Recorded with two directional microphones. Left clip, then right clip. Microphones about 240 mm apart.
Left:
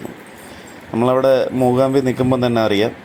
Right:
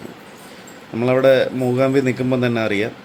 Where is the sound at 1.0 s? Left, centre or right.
Centre.